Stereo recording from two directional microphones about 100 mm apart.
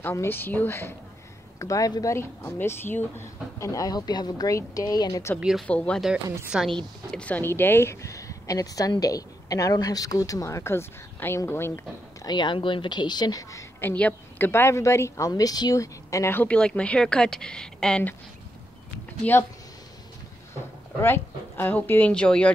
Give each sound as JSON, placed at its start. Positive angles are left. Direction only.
{"t": 0.0, "sound": "speech", "side_deg": 25}
{"t": 1.6, "sound": "speech", "side_deg": 35}
{"t": 2.1, "sound": "speech", "side_deg": 25}
{"t": 5.4, "sound": "speech", "side_deg": -5}
{"t": 5.7, "sound": "a woman's voice", "side_deg": 10}
{"t": 6.5, "sound": "speech", "side_deg": -5}
{"t": 7.1, "sound": "speech", "side_deg": 10}
{"t": 12.3, "sound": "speech", "side_deg": 50}
{"t": 13.7, "sound": "a woman's voice", "side_deg": 15}
{"t": 16.3, "sound": "a woman's voice", "side_deg": 10}
{"t": 19.2, "sound": "a woman's voice", "side_deg": 10}
{"t": 21.0, "sound": "a woman's voice", "side_deg": 20}